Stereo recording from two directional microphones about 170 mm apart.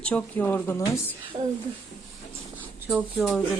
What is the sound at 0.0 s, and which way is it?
Speech, 10° left (ahead or behind).